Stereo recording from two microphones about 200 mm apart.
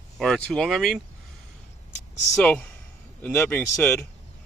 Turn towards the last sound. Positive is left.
turn(degrees=10)  # may be behind; listen again after turning